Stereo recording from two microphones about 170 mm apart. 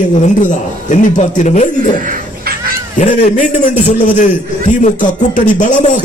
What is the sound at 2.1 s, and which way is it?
Cat, 60° right (ahead or behind).